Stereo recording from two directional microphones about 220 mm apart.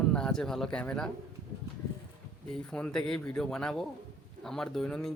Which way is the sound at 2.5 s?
5° left (ahead or behind).